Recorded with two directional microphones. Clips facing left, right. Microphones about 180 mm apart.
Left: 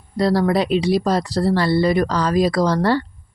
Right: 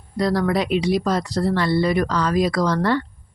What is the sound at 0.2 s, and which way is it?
Speech, 30° left (ahead or behind).